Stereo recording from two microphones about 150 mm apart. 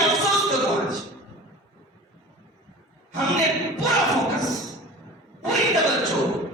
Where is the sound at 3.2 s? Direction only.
Centre (ahead or behind).